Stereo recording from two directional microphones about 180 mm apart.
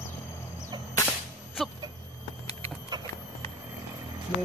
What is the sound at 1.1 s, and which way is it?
Whip, centre (ahead or behind).